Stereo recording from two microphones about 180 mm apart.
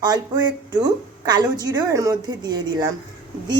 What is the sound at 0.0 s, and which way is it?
Speech, 20° right (ahead or behind).